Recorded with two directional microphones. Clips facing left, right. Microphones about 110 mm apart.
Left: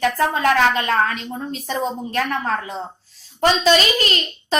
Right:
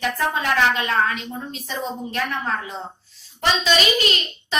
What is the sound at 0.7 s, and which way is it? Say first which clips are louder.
A woman's voice: left 2 dB; 45° left (ahead or behind).